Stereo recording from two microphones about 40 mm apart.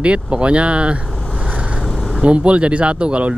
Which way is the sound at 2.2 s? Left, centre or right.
Right.